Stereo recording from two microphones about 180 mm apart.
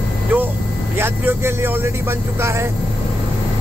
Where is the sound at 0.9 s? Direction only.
10° right (ahead or behind).